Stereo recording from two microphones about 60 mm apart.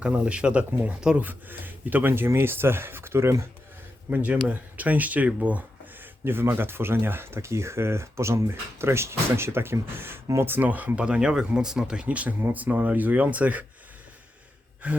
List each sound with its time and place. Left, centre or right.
0.0 s speech: right
4.1 s speech: right
6.2 s speech: right
12.4 s speech: right
14.8 s speech: right